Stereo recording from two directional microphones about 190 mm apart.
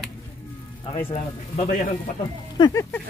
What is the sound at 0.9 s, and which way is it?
Speech, 30° left (ahead or behind).